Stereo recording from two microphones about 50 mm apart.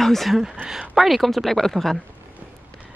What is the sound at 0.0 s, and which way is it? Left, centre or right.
A woman's voice, centre.